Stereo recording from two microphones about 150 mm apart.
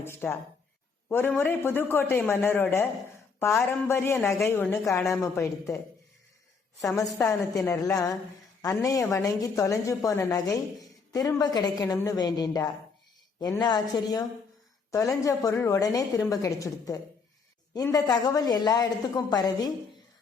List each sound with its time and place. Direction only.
0.0 s a woman's voice: 15° left (ahead or behind)
7.2 s a woman's voice: 20° left (ahead or behind)